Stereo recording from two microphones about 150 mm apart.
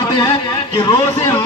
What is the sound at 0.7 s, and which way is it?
Speech, 25° left (ahead or behind).